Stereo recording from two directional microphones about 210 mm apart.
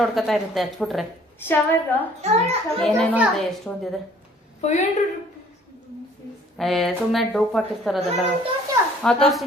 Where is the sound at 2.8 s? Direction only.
5° right (ahead or behind).